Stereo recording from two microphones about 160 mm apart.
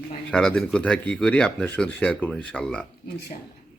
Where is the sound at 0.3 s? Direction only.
5° left (ahead or behind).